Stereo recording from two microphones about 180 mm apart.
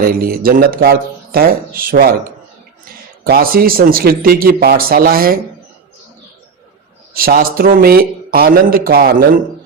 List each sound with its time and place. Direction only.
0.0 s speech: 55° right (ahead or behind)
7.1 s speech: 55° right (ahead or behind)